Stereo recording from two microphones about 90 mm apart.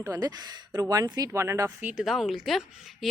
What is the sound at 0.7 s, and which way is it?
Speech, 40° right (ahead or behind).